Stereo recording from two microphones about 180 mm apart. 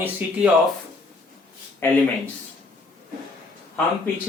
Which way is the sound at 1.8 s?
15° left (ahead or behind).